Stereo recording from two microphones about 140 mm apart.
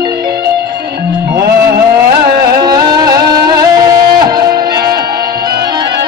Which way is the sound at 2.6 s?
30° right (ahead or behind).